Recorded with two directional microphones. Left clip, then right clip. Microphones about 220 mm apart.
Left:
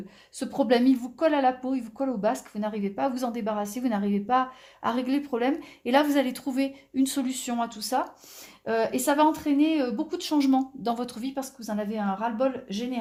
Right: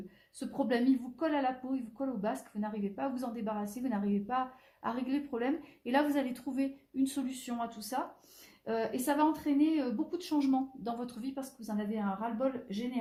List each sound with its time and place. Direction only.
0.3 s a woman's voice: 35° left (ahead or behind)